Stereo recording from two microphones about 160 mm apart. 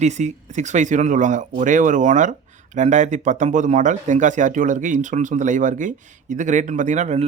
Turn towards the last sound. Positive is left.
turn(degrees=-50)  # may be behind; listen again after turning